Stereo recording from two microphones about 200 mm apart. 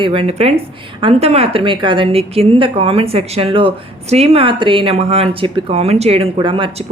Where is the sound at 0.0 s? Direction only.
25° right (ahead or behind).